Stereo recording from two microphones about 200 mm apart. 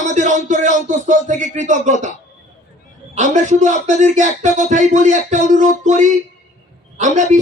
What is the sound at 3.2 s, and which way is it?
Speech, 35° right (ahead or behind).